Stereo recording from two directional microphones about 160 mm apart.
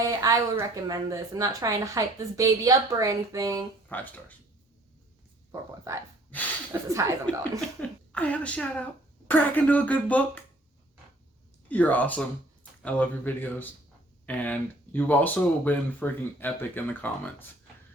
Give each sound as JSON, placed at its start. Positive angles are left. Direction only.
{"t": 0.1, "sound": "speech", "side_deg": -20}
{"t": 3.8, "sound": "speech", "side_deg": 10}
{"t": 5.5, "sound": "speech", "side_deg": -20}
{"t": 7.8, "sound": "speech", "side_deg": 10}
{"t": 11.7, "sound": "speech", "side_deg": 10}